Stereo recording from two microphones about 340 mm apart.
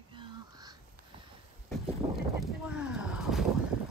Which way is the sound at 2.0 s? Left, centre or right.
Centre.